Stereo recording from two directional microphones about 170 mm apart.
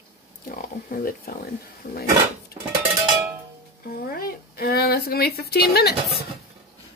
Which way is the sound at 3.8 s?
60° left (ahead or behind).